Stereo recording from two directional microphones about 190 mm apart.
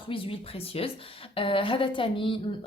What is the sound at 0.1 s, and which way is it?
A woman's voice, 30° left (ahead or behind).